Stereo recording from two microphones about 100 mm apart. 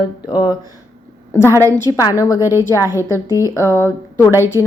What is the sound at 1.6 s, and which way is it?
Speech, 30° right (ahead or behind).